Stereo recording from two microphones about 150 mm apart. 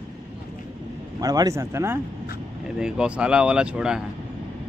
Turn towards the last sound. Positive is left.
turn(degrees=-5)  # may be behind; listen again after turning